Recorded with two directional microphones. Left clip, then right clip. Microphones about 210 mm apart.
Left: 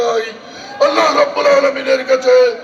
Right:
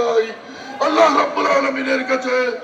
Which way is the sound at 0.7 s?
30° left (ahead or behind).